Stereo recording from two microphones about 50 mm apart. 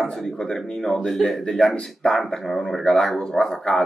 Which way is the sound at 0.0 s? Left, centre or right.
Centre.